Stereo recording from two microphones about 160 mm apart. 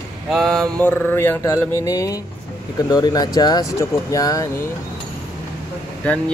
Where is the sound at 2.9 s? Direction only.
25° left (ahead or behind).